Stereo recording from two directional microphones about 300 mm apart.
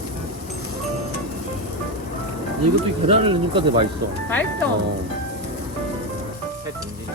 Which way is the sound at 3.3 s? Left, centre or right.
Centre.